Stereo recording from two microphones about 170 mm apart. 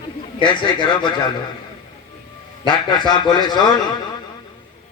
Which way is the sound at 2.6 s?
25° left (ahead or behind).